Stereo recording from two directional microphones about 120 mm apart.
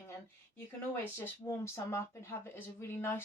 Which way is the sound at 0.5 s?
20° left (ahead or behind).